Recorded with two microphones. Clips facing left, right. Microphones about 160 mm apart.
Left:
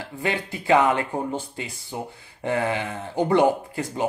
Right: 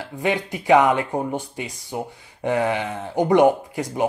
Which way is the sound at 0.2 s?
15° right (ahead or behind).